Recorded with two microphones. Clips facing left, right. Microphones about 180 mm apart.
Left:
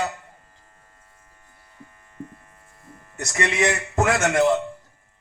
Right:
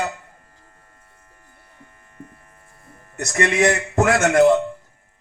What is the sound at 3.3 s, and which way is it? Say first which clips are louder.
Speech: right 4 dB; 50° right (ahead or behind).